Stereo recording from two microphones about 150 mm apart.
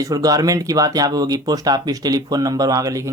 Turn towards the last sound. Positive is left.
turn(degrees=-20)  # may be behind; listen again after turning